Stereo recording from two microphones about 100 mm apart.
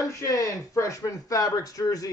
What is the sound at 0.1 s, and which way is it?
Speech, 30° left (ahead or behind).